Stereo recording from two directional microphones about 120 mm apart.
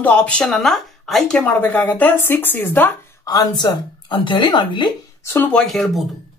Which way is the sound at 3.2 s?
35° left (ahead or behind).